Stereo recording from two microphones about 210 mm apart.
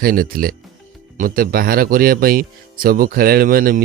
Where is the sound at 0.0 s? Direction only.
45° right (ahead or behind).